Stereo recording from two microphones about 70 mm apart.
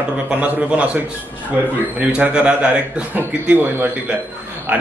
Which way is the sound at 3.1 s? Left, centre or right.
Right.